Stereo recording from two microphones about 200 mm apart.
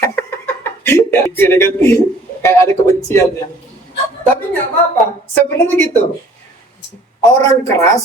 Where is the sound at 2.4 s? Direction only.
15° left (ahead or behind).